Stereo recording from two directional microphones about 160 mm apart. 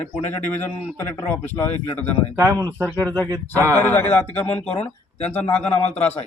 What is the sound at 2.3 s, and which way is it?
Speech, 20° right (ahead or behind).